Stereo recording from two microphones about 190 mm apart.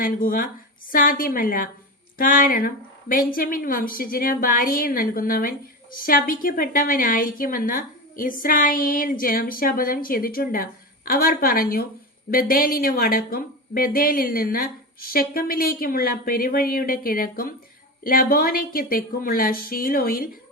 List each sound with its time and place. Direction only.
0.0 s a woman's voice: 45° left (ahead or behind)